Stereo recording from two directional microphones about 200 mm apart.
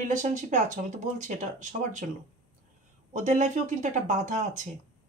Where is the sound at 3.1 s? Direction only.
40° right (ahead or behind).